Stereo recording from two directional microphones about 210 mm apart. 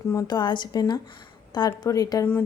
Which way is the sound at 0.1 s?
15° left (ahead or behind).